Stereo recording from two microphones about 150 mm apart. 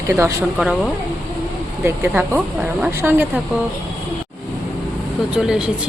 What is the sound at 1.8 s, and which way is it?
Speech, 10° right (ahead or behind).